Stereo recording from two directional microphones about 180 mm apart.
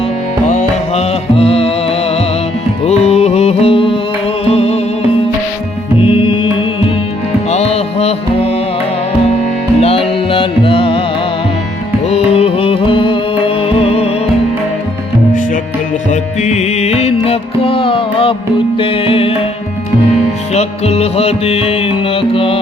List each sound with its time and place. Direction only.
0.4 s music: 40° left (ahead or behind)
6.0 s music: 30° left (ahead or behind)
9.8 s music: 30° left (ahead or behind)
12.0 s music: 35° left (ahead or behind)
16.4 s music: 40° left (ahead or behind)
20.5 s music: 35° left (ahead or behind)